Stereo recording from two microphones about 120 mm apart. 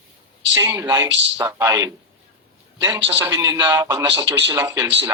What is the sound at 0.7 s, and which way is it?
Speech, 25° right (ahead or behind).